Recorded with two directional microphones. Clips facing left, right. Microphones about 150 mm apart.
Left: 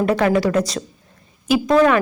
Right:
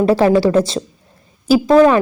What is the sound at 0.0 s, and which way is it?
A woman's voice, 30° right (ahead or behind).